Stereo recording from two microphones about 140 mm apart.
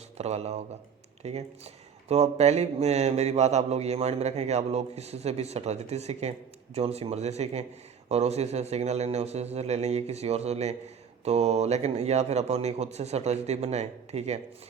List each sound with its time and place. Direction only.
0.2 s speech: 50° right (ahead or behind)